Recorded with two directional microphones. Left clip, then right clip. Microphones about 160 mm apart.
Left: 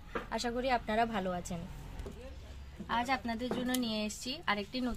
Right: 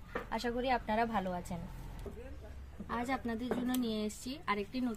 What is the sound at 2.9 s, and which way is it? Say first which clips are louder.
Speech: left 4 dB; 35° left (ahead or behind).